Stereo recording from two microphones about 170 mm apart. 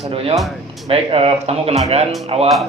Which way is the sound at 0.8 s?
35° right (ahead or behind).